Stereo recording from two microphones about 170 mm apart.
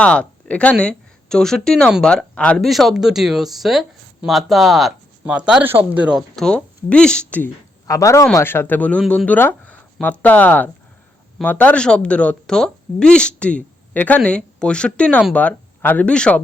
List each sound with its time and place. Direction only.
0.0 s a woman's voice: 5° left (ahead or behind)